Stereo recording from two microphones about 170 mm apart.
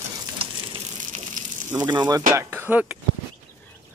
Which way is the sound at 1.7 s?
25° right (ahead or behind).